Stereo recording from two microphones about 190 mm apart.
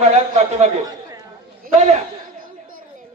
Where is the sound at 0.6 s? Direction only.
35° right (ahead or behind).